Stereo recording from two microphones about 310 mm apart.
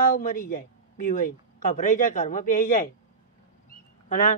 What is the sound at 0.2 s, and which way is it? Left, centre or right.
A man's voice, left.